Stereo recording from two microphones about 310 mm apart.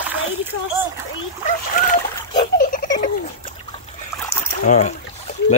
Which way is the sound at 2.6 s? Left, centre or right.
Left.